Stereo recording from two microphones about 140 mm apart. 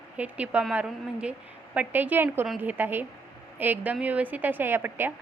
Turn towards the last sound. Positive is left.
turn(degrees=-15)  # may be behind; listen again after turning